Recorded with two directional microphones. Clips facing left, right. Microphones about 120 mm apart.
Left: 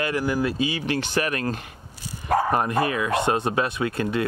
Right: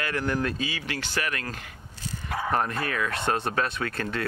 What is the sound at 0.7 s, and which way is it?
Speech, 20° left (ahead or behind).